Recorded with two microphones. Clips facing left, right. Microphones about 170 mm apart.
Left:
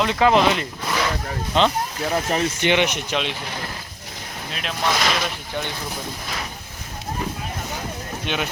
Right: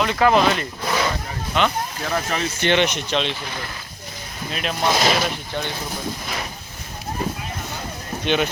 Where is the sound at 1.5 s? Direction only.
30° left (ahead or behind).